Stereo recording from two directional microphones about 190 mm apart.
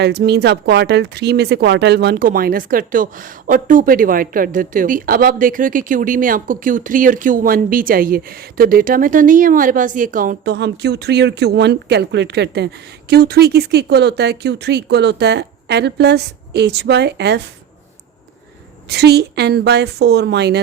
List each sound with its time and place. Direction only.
0.0 s speech: 60° right (ahead or behind); by 10.3 s 45° right (ahead or behind)
10.4 s speech: 60° right (ahead or behind)
18.9 s speech: 60° right (ahead or behind)